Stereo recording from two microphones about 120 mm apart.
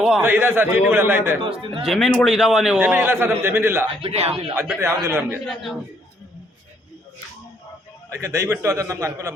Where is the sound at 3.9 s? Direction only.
55° right (ahead or behind).